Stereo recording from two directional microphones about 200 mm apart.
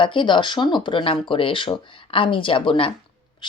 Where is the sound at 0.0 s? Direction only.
25° left (ahead or behind).